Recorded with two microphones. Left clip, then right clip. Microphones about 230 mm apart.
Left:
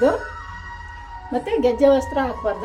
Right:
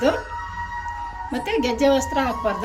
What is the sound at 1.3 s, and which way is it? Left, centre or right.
A woman's voice, left.